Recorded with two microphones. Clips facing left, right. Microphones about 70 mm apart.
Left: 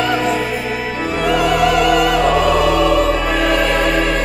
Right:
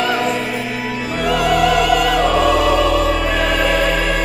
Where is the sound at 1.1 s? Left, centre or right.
Centre.